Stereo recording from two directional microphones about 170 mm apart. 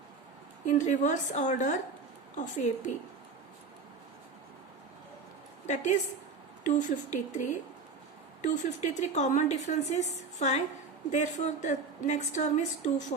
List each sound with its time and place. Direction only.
0.6 s a woman's voice: 45° left (ahead or behind)
5.6 s a woman's voice: 45° left (ahead or behind)